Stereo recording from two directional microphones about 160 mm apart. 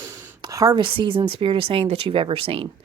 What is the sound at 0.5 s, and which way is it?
Speech, 20° right (ahead or behind).